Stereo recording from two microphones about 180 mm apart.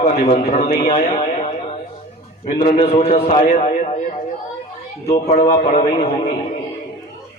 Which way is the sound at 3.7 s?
40° left (ahead or behind).